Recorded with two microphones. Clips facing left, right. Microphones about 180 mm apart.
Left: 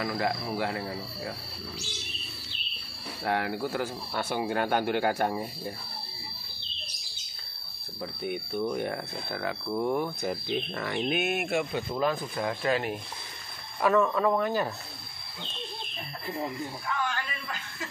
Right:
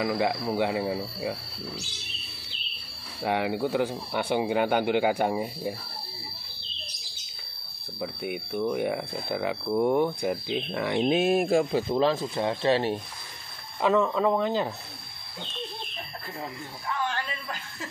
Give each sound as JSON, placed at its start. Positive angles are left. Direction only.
{"t": 0.0, "sound": "speech", "side_deg": -20}
{"t": 3.2, "sound": "speech", "side_deg": -15}
{"t": 8.0, "sound": "speech", "side_deg": -10}
{"t": 13.7, "sound": "speech", "side_deg": -20}